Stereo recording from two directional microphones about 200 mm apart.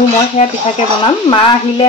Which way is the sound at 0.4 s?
35° left (ahead or behind).